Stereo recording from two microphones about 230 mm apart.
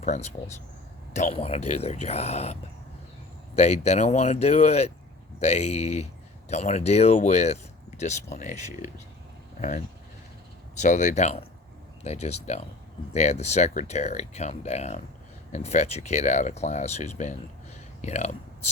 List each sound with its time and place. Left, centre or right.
0.0 s speech: left